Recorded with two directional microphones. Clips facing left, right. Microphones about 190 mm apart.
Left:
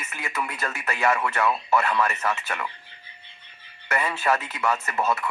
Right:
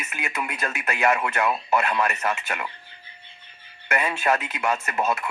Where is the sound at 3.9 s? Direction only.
20° right (ahead or behind).